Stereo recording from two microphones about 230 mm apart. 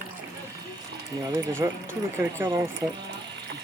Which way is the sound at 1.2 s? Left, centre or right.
Centre.